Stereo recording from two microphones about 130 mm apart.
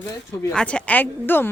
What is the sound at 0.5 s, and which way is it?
Speech, 10° left (ahead or behind).